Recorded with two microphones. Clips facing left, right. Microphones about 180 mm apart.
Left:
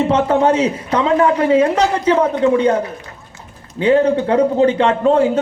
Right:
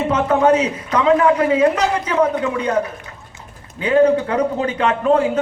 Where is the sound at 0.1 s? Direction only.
30° left (ahead or behind).